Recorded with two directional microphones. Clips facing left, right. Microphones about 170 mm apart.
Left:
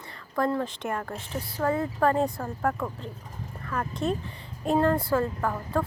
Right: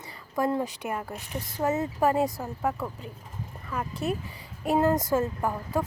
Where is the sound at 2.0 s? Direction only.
10° right (ahead or behind).